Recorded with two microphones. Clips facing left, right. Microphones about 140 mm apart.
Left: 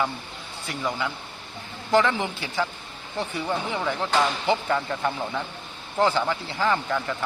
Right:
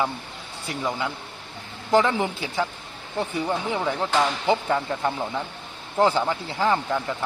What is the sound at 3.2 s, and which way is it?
Speech, 10° right (ahead or behind).